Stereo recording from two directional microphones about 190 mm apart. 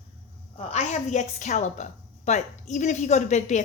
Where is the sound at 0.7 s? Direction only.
35° left (ahead or behind).